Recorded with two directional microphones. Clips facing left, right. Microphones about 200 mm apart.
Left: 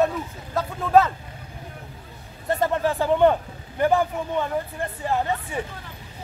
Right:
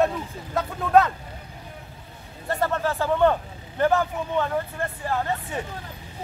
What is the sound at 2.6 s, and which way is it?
Speech, 15° left (ahead or behind).